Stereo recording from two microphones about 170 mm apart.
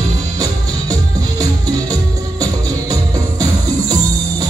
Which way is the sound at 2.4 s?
20° right (ahead or behind).